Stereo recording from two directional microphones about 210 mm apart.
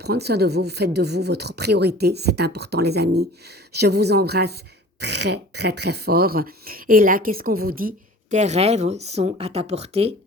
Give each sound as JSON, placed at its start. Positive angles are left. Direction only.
{"t": 0.0, "sound": "speech", "side_deg": -50}